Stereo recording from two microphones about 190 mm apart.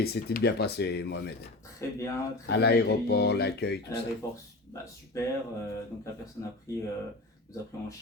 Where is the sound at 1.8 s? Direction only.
15° left (ahead or behind).